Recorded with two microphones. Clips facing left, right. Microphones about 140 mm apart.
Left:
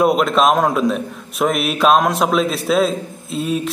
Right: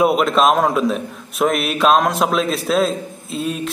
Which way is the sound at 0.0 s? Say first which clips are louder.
Even; centre (ahead or behind).